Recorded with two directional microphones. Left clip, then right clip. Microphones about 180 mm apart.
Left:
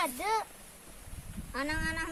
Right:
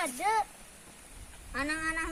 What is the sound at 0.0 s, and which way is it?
Baby cry, 10° right (ahead or behind).